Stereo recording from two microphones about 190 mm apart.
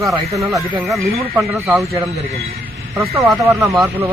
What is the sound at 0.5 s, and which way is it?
Speech, centre (ahead or behind).